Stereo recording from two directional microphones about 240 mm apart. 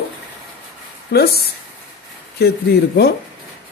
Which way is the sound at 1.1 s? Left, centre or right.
Left.